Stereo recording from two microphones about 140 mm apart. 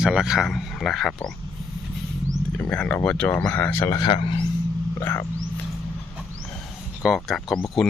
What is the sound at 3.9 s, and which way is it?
Speech, 35° left (ahead or behind).